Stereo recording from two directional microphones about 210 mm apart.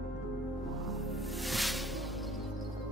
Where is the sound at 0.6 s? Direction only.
Centre (ahead or behind).